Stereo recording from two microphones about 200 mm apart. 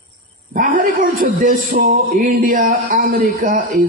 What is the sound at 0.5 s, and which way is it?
A man's voice, 45° right (ahead or behind).